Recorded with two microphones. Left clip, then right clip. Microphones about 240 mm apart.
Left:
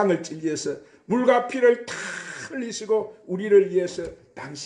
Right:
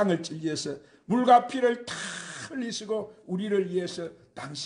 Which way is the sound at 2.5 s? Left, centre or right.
Right.